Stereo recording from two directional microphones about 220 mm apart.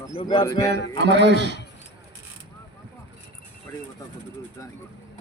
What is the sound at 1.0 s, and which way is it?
Speech, 50° right (ahead or behind).